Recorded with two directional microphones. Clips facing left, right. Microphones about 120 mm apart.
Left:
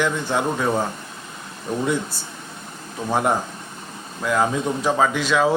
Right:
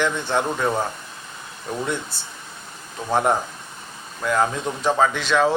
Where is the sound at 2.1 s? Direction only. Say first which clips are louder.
Left 3 dB; 40° left (ahead or behind).